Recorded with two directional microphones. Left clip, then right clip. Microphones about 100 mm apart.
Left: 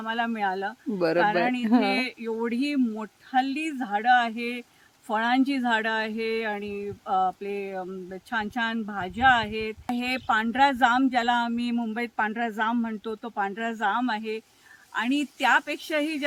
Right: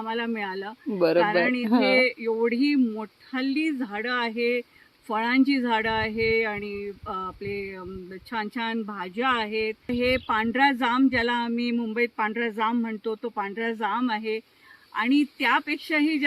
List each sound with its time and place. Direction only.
0.0 s speech: 20° left (ahead or behind)